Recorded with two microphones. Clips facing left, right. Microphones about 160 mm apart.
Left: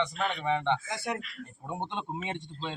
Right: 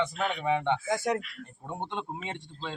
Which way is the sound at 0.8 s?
45° right (ahead or behind).